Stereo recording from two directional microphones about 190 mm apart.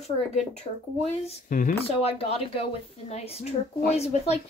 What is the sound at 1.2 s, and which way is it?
Speech, 40° left (ahead or behind).